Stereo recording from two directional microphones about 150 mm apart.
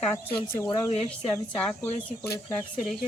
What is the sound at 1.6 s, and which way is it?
Speech, 10° left (ahead or behind).